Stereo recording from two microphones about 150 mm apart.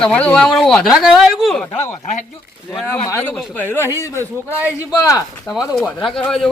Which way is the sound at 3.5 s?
15° left (ahead or behind).